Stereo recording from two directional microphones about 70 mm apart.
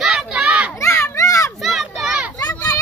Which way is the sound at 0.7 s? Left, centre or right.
Left.